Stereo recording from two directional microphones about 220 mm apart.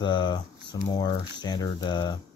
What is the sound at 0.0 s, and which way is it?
Speech, 20° left (ahead or behind).